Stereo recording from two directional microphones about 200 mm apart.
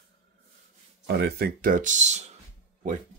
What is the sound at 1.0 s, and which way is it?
Speech, 55° right (ahead or behind).